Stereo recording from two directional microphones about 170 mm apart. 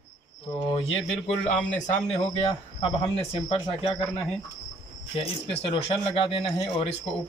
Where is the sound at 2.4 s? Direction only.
35° left (ahead or behind).